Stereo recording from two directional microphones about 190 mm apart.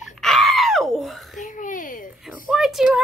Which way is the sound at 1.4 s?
40° left (ahead or behind).